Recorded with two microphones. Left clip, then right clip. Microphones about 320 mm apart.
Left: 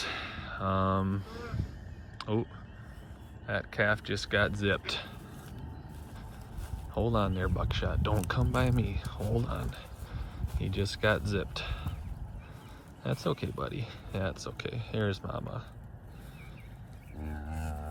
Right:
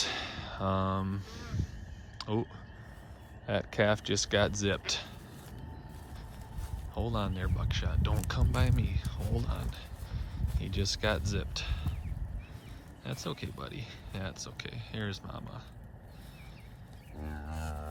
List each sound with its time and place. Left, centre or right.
0.0 s a sound: centre
3.4 s speech: centre
6.9 s speech: centre
13.0 s speech: centre
17.2 s livestock: centre